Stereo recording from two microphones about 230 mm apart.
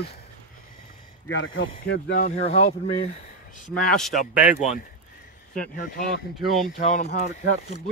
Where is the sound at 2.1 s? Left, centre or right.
Left.